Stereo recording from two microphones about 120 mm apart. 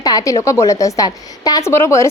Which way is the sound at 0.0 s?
30° left (ahead or behind).